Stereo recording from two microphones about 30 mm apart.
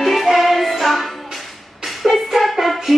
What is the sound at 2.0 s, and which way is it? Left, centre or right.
Music, centre.